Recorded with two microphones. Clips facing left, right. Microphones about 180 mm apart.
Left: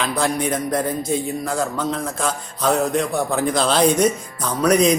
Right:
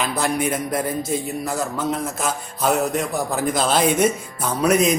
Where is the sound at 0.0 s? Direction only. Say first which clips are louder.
Left 1 dB; 5° right (ahead or behind).